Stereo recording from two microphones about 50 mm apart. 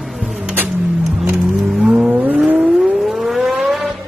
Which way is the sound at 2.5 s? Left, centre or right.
Right.